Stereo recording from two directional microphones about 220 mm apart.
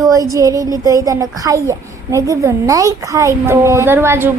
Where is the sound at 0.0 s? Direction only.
15° right (ahead or behind).